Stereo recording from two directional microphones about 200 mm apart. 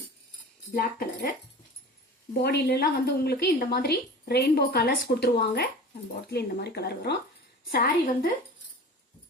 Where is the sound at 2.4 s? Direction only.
50° left (ahead or behind).